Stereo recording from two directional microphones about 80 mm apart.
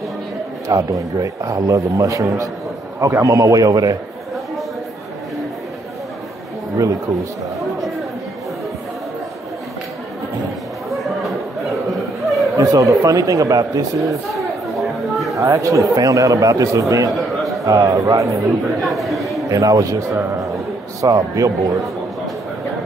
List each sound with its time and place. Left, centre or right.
0.7 s a man's voice: right
10.9 s chatter: centre
12.3 s a sound: centre
12.5 s a man's voice: right
14.7 s chatter: centre
15.3 s a man's voice: right
17.4 s a sound: centre
17.6 s a man's voice: right
18.8 s speech: centre
19.5 s a man's voice: right
21.0 s a man's voice: right